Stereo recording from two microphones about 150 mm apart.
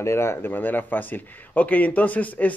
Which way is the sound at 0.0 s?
15° left (ahead or behind).